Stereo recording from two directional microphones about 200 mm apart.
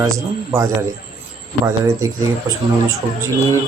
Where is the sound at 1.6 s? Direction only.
15° right (ahead or behind).